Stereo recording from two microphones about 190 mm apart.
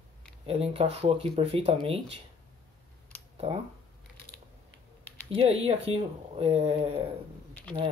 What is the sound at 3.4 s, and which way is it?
Speech, 35° right (ahead or behind).